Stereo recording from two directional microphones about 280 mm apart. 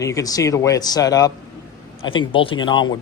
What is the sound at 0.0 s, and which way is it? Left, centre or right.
Speech, centre.